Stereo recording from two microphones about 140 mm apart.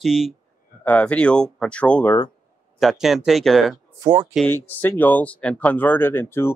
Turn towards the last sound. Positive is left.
turn(degrees=15)  # may be behind; listen again after turning